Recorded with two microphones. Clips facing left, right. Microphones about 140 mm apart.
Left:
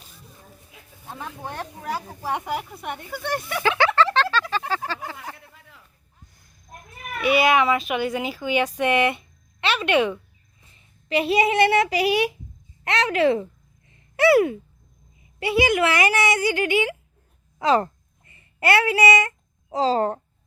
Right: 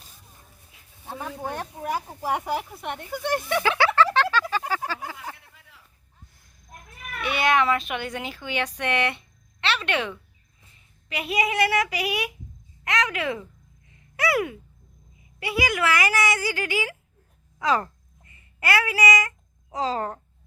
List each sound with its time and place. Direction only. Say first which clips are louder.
1.5 s speech: right 1 dB; 15° right (ahead or behind)
3.6 s a sound: left 2 dB; 10° right (ahead or behind)
7.2 s speech: left 4 dB; 5° left (ahead or behind)
11.1 s speech: left 6 dB; 30° left (ahead or behind)